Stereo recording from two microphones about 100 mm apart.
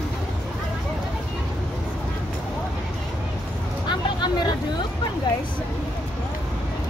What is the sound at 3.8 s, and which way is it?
Vehicle, 45° left (ahead or behind).